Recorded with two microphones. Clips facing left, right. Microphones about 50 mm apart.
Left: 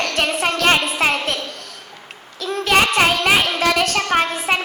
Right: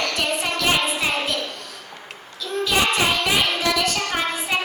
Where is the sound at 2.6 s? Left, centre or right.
Left.